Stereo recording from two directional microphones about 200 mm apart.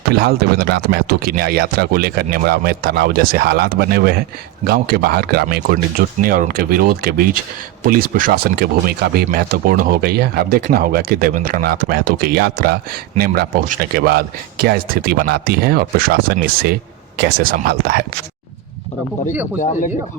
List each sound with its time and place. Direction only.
0.1 s speech: 50° right (ahead or behind)